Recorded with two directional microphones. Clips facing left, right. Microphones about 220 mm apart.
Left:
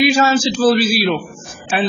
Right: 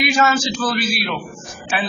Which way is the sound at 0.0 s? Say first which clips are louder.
Left 5 dB; 30° left (ahead or behind).